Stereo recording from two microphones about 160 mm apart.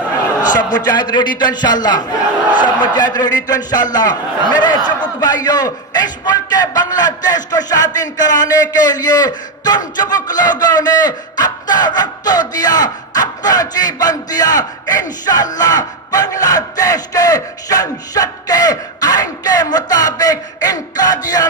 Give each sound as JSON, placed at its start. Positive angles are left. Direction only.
{"t": 0.5, "sound": "a man's voice", "side_deg": 25}